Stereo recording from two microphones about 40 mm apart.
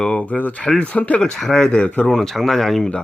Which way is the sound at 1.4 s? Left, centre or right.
Centre.